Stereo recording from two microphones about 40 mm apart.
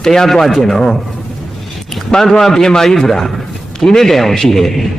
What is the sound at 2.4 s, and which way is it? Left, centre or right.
A man's voice, centre.